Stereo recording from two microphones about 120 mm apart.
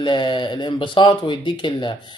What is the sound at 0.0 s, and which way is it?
Speech, 40° left (ahead or behind).